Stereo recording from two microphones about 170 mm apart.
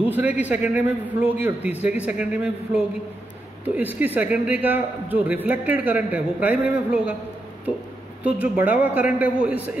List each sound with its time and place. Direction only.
0.0 s a man's voice: 10° right (ahead or behind)
8.2 s a man's voice: 10° right (ahead or behind)